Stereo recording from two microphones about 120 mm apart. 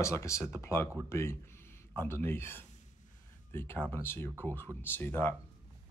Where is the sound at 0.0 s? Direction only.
25° left (ahead or behind).